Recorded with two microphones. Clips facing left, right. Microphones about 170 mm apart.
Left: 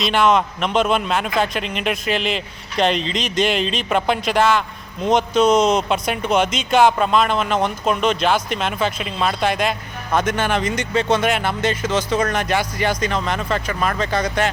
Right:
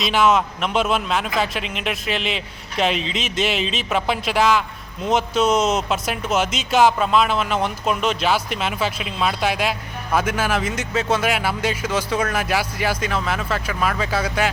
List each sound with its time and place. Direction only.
0.0 s speech: 5° right (ahead or behind)